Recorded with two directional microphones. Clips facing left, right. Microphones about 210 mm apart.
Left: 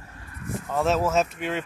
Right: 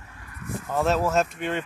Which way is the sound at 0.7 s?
Centre (ahead or behind).